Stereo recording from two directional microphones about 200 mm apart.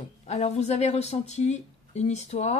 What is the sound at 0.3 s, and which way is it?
Speech, 35° left (ahead or behind).